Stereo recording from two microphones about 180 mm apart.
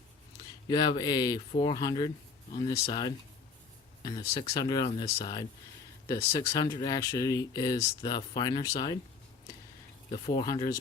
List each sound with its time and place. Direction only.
0.7 s speech: 25° left (ahead or behind)
10.1 s speech: 35° left (ahead or behind)